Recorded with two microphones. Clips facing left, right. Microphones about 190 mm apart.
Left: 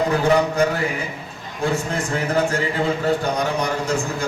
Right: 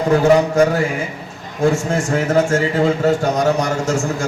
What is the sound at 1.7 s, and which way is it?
Speech, 45° right (ahead or behind).